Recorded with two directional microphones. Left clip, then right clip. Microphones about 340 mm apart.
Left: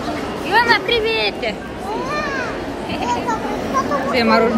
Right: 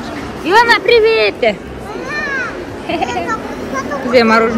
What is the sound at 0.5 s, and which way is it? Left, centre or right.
Speech, centre.